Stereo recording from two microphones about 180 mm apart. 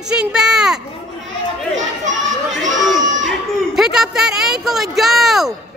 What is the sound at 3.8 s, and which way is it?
A woman's voice, centre (ahead or behind).